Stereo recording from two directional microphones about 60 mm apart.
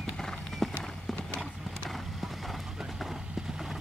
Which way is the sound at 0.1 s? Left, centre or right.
Centre.